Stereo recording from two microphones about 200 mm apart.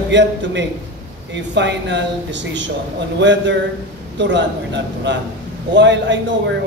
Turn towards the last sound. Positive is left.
turn(degrees=-60)  # may be behind; listen again after turning